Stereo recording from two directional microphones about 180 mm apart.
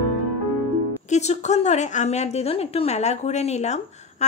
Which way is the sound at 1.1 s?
40° left (ahead or behind).